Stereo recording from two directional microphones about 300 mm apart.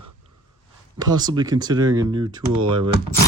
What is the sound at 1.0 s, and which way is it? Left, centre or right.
Speech, centre.